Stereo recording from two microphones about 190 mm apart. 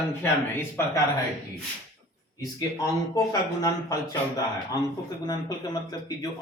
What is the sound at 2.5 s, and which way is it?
Speech, 20° left (ahead or behind).